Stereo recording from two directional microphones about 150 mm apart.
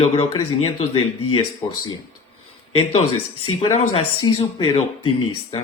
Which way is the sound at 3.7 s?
40° left (ahead or behind).